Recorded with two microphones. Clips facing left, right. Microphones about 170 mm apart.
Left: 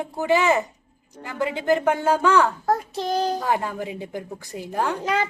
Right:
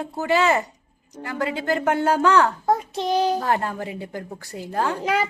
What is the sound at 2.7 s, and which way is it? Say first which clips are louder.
Speech: right 2 dB; centre (ahead or behind).